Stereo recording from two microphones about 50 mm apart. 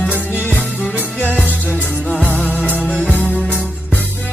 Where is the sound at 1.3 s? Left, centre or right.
Left.